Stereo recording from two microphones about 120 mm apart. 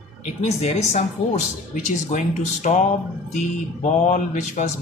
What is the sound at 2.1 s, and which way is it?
Speech, 75° left (ahead or behind).